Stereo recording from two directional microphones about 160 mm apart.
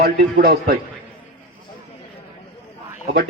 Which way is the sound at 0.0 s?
80° right.